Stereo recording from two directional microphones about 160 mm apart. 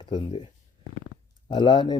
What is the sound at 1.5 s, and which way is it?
Speech, 30° left (ahead or behind).